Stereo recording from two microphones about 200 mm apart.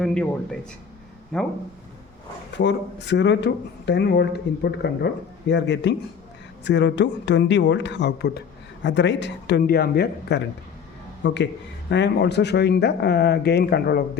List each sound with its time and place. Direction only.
0.0 s speech: 5° left (ahead or behind)
1.3 s speech: 5° left (ahead or behind)
2.6 s speech: 60° left (ahead or behind)